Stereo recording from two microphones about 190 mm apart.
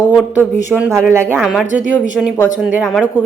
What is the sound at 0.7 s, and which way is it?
Speech, 10° right (ahead or behind).